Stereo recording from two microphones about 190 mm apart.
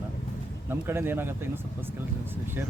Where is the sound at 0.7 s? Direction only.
10° right (ahead or behind).